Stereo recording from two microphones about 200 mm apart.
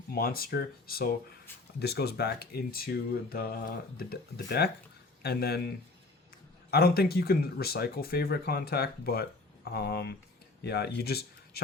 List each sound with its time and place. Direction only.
0.1 s speech: 50° left (ahead or behind)
6.7 s speech: 50° left (ahead or behind)